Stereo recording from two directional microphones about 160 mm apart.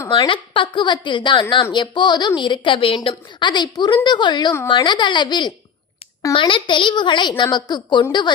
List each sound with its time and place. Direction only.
0.1 s a woman's voice: 30° left (ahead or behind)